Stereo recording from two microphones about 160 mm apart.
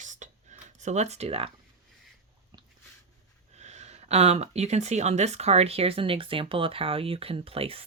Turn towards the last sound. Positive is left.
turn(degrees=-35)  # may be behind; listen again after turning